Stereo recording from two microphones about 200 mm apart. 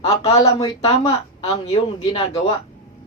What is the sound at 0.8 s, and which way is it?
A woman's voice, 30° left (ahead or behind).